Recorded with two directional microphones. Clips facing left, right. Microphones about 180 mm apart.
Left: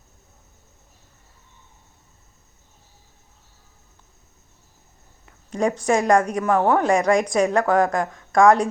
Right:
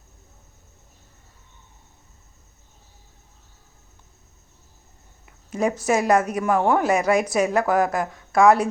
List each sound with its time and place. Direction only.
5.2 s speech: 5° right (ahead or behind)